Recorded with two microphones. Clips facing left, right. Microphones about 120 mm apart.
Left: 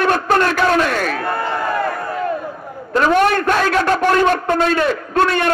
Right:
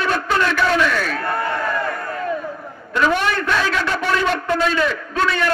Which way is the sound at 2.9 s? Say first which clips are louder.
Left 5 dB; 50° left (ahead or behind).